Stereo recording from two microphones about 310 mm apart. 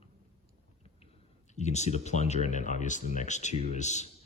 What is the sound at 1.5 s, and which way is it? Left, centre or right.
Speech, left.